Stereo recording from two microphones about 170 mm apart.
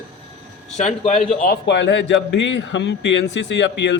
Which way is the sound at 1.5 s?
90° left.